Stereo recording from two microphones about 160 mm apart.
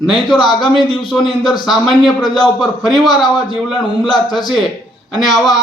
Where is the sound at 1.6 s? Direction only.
Centre (ahead or behind).